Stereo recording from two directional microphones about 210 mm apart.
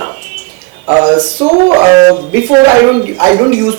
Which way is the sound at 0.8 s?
20° right (ahead or behind).